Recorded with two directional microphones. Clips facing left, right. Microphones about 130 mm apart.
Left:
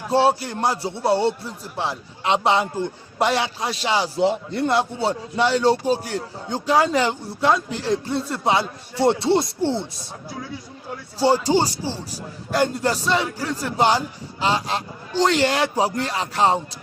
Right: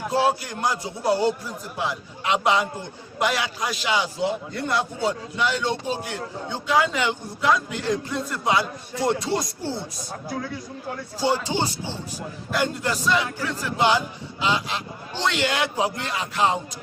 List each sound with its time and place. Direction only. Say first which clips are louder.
0.1 s a man's voice: left 5 dB; 30° left (ahead or behind)
11.2 s a man's voice: left 6 dB; 35° left (ahead or behind)